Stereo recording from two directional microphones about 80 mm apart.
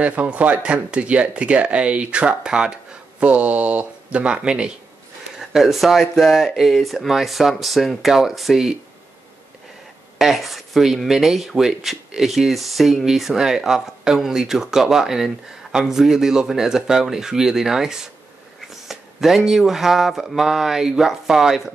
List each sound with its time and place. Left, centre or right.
0.0 s speech: centre
10.1 s speech: centre